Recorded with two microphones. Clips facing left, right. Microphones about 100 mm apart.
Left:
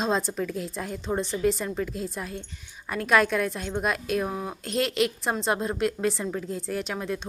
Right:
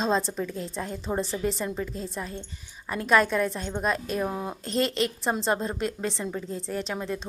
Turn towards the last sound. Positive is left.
turn(degrees=0)  # may be behind; listen again after turning